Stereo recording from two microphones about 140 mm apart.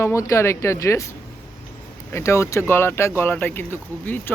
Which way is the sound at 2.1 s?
20° left (ahead or behind).